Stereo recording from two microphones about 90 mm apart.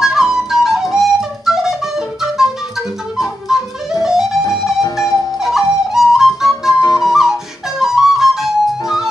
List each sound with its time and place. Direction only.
0.0 s flute: 5° right (ahead or behind)
0.9 s music: 5° right (ahead or behind)
4.8 s music: 35° left (ahead or behind)
5.4 s flute: 5° right (ahead or behind)
6.8 s whistle: 45° left (ahead or behind)
7.1 s music: 5° right (ahead or behind)
7.8 s flute: 5° right (ahead or behind)